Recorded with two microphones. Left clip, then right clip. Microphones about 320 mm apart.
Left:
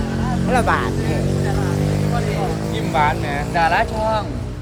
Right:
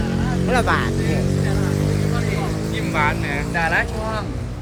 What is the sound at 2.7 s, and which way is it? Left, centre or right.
Vehicle, centre.